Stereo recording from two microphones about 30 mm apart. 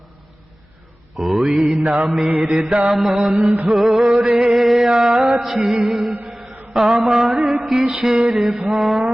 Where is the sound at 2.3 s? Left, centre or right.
Right.